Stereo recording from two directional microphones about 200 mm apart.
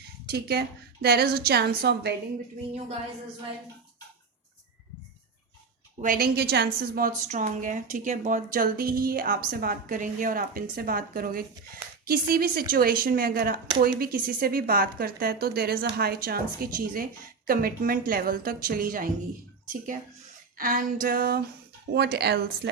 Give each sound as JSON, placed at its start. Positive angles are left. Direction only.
{"t": 0.3, "sound": "a woman's voice", "side_deg": -50}
{"t": 6.0, "sound": "a woman's voice", "side_deg": -45}
{"t": 7.3, "sound": "a woman's voice", "side_deg": -40}